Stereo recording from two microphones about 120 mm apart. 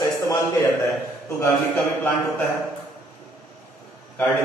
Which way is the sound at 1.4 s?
15° left (ahead or behind).